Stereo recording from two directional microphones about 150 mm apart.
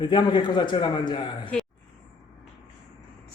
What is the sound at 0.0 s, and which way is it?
A man's voice, 30° left (ahead or behind).